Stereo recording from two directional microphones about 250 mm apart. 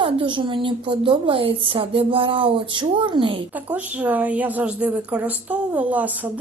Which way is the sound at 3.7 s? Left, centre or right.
Centre.